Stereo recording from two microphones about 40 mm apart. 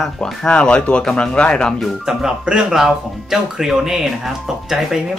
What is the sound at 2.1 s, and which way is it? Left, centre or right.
Speech, centre.